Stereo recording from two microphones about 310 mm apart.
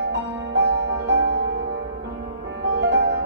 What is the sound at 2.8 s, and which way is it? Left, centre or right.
Music, right.